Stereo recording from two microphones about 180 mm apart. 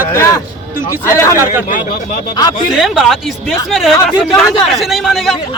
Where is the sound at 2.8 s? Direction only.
Centre (ahead or behind).